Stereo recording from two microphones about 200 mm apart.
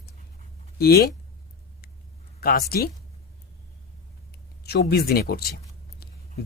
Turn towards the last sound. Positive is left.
turn(degrees=50)  # may be behind; listen again after turning